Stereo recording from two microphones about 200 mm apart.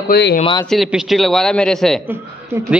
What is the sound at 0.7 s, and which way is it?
A man's voice, centre (ahead or behind).